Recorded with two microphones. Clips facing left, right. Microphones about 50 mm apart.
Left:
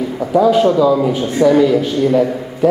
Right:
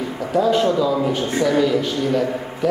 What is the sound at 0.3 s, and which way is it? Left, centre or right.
Speech, centre.